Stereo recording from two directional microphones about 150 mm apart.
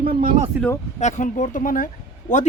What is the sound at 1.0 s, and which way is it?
Speech, 55° left (ahead or behind).